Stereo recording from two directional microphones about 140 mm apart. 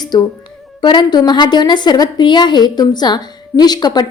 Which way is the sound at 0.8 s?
35° left (ahead or behind).